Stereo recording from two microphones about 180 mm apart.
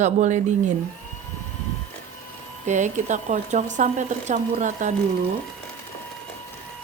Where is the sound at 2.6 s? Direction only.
45° right (ahead or behind).